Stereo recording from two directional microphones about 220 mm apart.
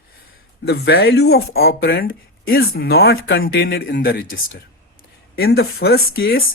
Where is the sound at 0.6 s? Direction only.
50° left (ahead or behind).